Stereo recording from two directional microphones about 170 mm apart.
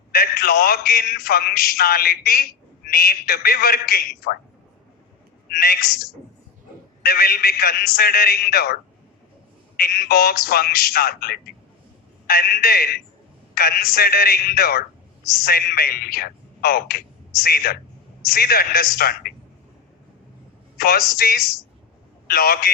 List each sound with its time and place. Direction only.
0.1 s a man's voice: 60° left (ahead or behind)
5.5 s a man's voice: 60° left (ahead or behind)
20.7 s a man's voice: 65° left (ahead or behind)